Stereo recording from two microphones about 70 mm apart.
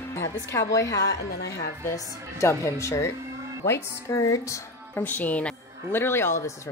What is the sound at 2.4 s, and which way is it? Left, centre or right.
A woman's voice, left.